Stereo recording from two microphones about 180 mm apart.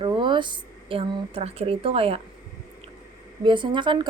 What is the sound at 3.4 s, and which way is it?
Speech, 25° right (ahead or behind).